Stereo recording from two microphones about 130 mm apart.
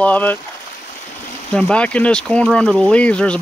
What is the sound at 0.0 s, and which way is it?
Speech, 15° left (ahead or behind).